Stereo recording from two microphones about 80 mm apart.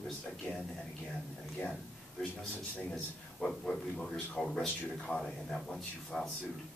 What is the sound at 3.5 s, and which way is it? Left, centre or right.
Speech, centre.